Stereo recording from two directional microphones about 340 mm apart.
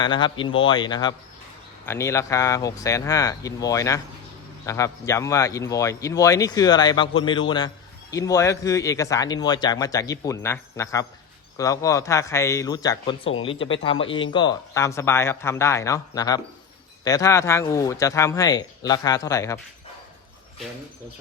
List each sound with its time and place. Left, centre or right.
0.0 s speech: centre